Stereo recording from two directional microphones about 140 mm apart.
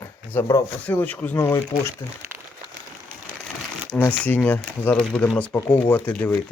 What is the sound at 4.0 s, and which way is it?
Speech, 10° left (ahead or behind).